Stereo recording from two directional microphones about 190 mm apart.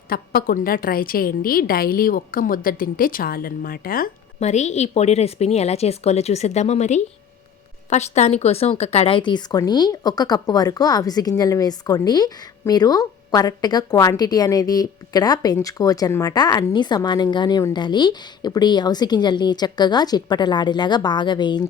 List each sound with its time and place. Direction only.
0.1 s a woman's voice: 50° left (ahead or behind)
4.4 s speech: 35° left (ahead or behind)